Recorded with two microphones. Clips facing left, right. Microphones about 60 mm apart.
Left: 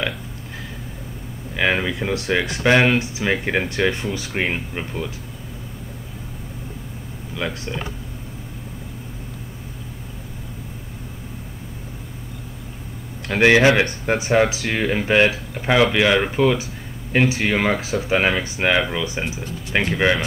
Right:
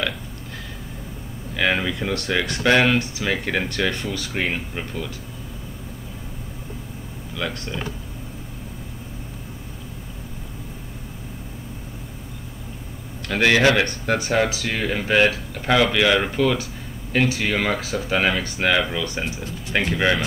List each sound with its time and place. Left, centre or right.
1.5 s speech: centre
7.3 s speech: centre
13.3 s speech: left